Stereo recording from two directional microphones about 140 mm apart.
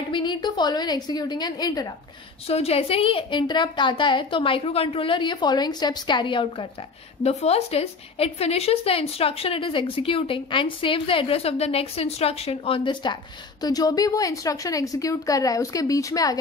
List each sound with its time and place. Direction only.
0.1 s a woman's voice: 35° left (ahead or behind)
2.4 s a woman's voice: 45° left (ahead or behind)
7.2 s a woman's voice: 50° left (ahead or behind); by 16.3 s 25° left (ahead or behind)